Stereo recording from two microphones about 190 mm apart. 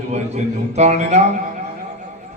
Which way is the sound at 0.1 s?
35° right (ahead or behind).